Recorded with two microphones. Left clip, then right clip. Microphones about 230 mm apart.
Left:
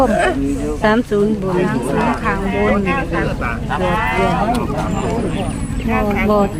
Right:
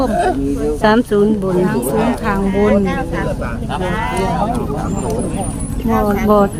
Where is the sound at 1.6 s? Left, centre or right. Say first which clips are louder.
Right 1 dB; right.